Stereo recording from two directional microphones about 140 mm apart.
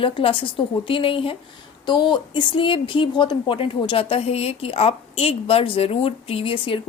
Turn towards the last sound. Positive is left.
turn(degrees=40)  # may be behind; listen again after turning